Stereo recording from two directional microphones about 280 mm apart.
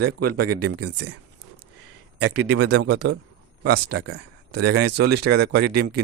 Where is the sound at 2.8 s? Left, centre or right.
Right.